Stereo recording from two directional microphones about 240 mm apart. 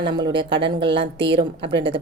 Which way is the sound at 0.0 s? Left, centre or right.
Centre.